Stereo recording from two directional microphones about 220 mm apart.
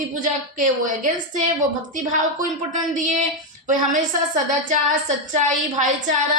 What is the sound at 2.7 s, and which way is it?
A woman's voice, 35° right (ahead or behind).